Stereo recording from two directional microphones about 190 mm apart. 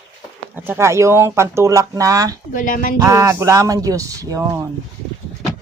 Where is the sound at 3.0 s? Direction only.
15° right (ahead or behind).